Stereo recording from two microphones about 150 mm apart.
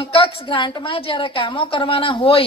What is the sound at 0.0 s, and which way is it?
A woman's voice, 35° left (ahead or behind).